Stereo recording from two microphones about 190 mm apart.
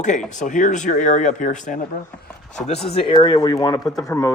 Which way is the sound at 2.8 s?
30° left (ahead or behind).